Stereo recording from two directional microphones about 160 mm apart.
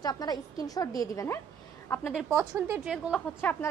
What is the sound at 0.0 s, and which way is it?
A woman's voice, 25° left (ahead or behind).